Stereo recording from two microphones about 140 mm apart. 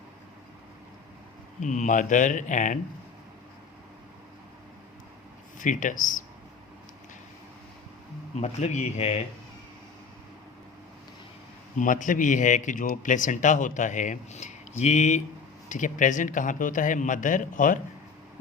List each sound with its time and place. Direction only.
1.6 s a man's voice: 60° left (ahead or behind)
5.5 s speech: 65° left (ahead or behind)
8.4 s speech: 55° left (ahead or behind)
11.8 s a man's voice: 65° left (ahead or behind)